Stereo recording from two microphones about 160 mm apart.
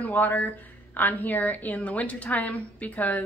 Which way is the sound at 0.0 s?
10° left (ahead or behind).